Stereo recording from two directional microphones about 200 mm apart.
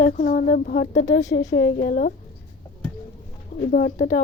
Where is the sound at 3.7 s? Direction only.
55° left (ahead or behind).